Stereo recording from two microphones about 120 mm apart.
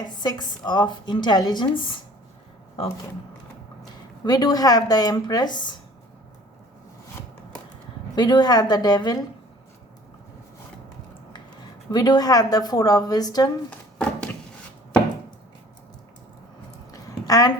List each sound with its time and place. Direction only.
0.2 s a woman's voice: 35° left (ahead or behind)
4.3 s a woman's voice: 35° left (ahead or behind)
8.1 s a woman's voice: 35° left (ahead or behind)
11.1 s a sound: 40° left (ahead or behind)
11.9 s a woman's voice: 35° left (ahead or behind)
16.9 s a sound: 30° left (ahead or behind)